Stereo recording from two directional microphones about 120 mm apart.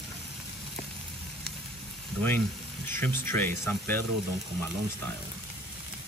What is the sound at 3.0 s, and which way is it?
Speech, 20° left (ahead or behind).